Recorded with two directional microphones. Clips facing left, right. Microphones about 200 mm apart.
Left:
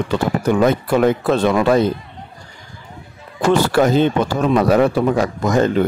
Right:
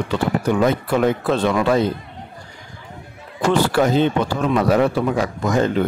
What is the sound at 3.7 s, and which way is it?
A man's voice, 45° left (ahead or behind).